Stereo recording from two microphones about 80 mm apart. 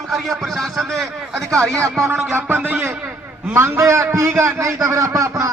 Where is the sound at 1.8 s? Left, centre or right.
Right.